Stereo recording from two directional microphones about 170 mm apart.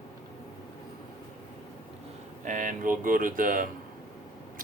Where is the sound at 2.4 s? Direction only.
50° right (ahead or behind).